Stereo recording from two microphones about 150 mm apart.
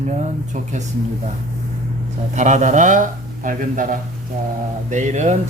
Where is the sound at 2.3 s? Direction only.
55° right (ahead or behind).